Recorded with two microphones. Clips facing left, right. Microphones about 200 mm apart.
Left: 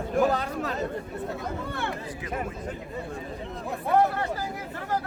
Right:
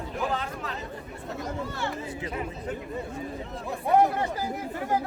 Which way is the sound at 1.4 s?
55° left (ahead or behind).